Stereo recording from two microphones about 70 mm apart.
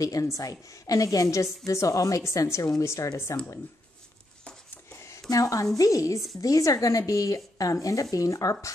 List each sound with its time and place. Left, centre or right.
0.0 s a woman's voice: left
5.3 s a woman's voice: left